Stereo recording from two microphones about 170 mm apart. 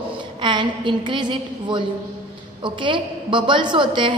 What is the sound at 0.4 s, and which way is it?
A woman's voice, 30° right (ahead or behind).